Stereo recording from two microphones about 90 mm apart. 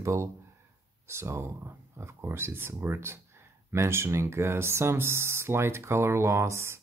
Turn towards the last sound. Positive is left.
turn(degrees=-30)  # may be behind; listen again after turning